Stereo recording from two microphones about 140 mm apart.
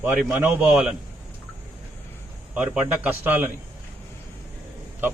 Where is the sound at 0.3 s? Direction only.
15° right (ahead or behind).